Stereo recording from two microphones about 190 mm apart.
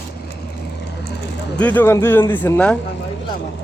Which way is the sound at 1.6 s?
10° left (ahead or behind).